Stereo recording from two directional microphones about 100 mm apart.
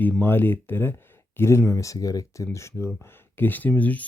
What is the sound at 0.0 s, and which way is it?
Speech, 20° left (ahead or behind).